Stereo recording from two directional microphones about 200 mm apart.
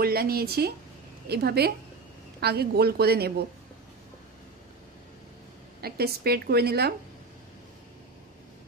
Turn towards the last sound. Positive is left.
turn(degrees=-55)  # may be behind; listen again after turning